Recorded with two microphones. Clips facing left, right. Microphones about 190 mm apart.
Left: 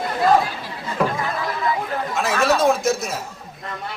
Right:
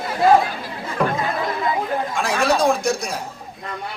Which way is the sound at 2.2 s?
Centre (ahead or behind).